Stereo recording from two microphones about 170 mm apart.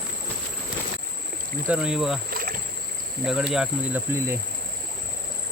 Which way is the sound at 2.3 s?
55° right (ahead or behind).